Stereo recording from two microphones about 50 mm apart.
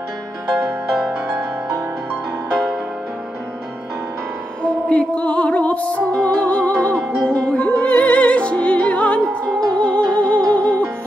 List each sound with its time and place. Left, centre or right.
4.8 s music: left